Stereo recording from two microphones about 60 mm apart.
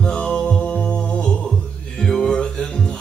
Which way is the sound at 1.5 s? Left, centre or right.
Centre.